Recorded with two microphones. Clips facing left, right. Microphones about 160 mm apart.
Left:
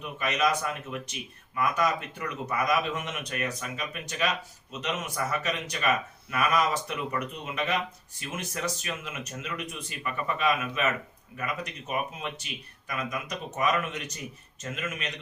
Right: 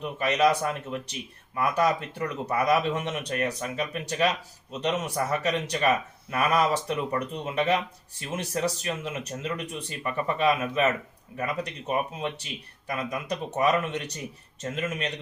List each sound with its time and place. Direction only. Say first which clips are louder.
0.0 s speech: right 5 dB; 35° right (ahead or behind)